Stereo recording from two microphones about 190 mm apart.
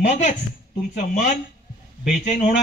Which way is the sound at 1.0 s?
40° left (ahead or behind).